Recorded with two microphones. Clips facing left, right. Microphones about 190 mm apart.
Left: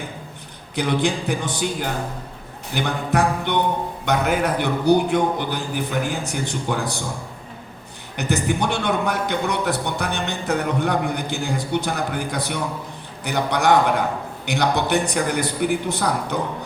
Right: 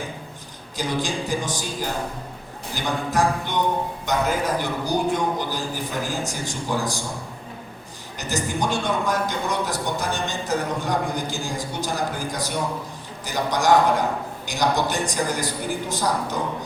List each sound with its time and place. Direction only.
0.8 s a man's voice: 60° left (ahead or behind)
8.1 s a man's voice: 60° left (ahead or behind)